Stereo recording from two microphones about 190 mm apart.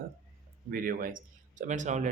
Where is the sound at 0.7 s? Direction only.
50° right (ahead or behind).